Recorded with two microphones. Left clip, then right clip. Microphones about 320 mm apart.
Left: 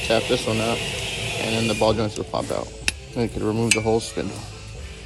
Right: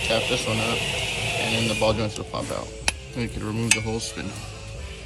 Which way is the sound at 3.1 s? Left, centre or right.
Centre.